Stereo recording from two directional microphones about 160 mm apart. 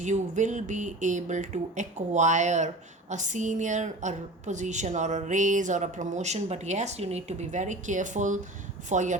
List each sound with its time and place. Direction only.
0.0 s a woman's voice: 50° right (ahead or behind)